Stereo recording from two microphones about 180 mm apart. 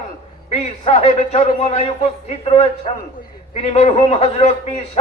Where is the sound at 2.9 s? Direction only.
35° left (ahead or behind).